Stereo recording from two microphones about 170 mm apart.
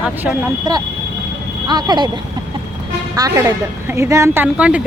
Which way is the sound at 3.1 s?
20° right (ahead or behind).